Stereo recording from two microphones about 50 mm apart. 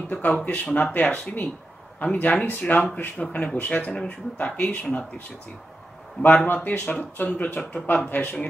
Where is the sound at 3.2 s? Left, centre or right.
Left.